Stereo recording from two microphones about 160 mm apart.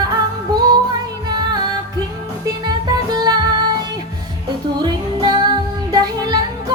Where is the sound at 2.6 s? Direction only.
25° right (ahead or behind).